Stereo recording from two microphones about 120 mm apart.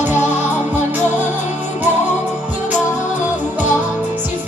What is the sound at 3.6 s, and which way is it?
Music, 15° right (ahead or behind).